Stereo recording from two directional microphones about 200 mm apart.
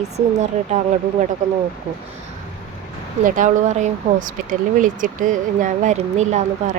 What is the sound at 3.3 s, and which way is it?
Speech, 40° right (ahead or behind).